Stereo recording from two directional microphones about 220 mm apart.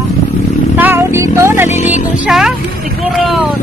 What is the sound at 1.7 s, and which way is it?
Music, 30° left (ahead or behind).